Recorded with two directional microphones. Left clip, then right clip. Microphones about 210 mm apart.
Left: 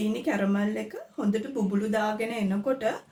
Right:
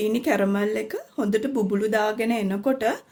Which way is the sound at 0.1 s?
50° right (ahead or behind).